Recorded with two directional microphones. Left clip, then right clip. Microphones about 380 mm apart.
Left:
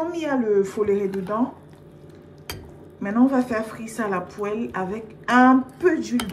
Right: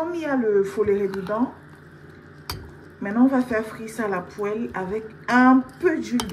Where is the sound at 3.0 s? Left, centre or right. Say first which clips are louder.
Even; left.